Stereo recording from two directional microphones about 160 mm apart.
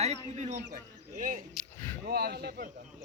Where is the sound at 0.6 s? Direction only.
55° right (ahead or behind).